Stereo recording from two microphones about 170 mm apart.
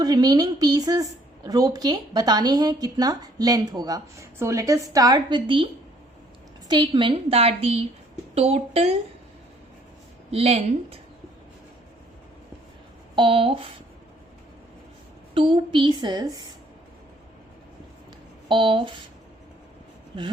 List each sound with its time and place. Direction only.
0.0 s a woman's voice: 25° right (ahead or behind)
6.7 s a woman's voice: 25° right (ahead or behind)
10.3 s a woman's voice: 35° right (ahead or behind)
13.1 s a woman's voice: 30° right (ahead or behind)
15.4 s a woman's voice: 30° right (ahead or behind)
18.4 s a woman's voice: 30° right (ahead or behind)